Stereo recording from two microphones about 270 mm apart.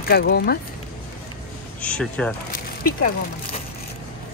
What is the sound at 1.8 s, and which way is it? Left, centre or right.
Speech, centre.